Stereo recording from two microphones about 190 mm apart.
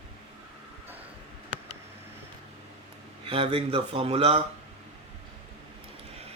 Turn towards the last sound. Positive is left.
turn(degrees=-30)  # may be behind; listen again after turning